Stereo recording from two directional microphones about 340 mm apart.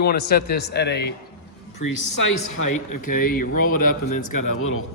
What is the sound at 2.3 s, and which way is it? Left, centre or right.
Speech, left.